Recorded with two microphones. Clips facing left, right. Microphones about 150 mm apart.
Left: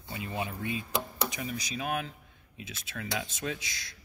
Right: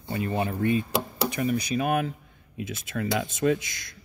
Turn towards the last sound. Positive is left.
turn(degrees=-55)  # may be behind; listen again after turning